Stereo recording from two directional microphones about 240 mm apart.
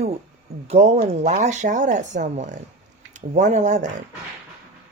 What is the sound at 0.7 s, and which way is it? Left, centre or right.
Speech, right.